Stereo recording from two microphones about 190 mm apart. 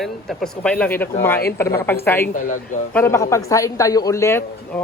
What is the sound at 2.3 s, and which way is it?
Speech, 45° left (ahead or behind).